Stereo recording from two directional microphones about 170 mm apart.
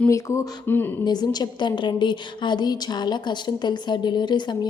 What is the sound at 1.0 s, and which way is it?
A woman's voice, 25° left (ahead or behind).